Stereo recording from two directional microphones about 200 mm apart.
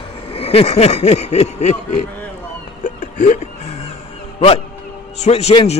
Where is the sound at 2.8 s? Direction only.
40° left (ahead or behind).